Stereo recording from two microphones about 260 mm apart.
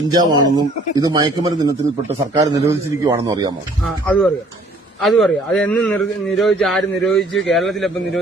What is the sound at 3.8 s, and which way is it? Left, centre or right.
A man's voice, centre.